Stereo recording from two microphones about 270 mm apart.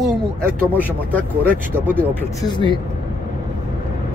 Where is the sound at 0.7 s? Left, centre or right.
Centre.